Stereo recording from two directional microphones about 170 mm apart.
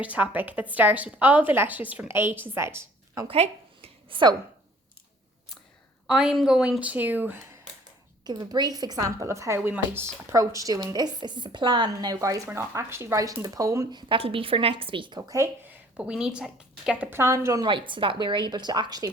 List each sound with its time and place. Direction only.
0.0 s a woman's voice: 10° right (ahead or behind)
3.2 s a sound: 35° right (ahead or behind)
6.1 s a woman's voice: 5° right (ahead or behind)
8.2 s a woman's voice: 25° right (ahead or behind)
14.1 s a woman's voice: 35° right (ahead or behind)
16.0 s speech: 5° right (ahead or behind); by 19.1 s 25° right (ahead or behind)